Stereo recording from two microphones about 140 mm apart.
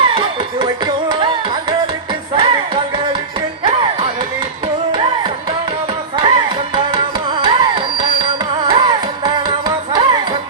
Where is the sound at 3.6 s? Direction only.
35° right (ahead or behind).